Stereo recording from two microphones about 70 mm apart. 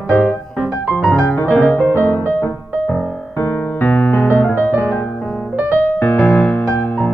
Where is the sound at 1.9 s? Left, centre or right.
Left.